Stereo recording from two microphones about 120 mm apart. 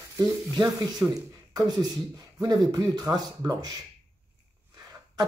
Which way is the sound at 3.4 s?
30° right (ahead or behind).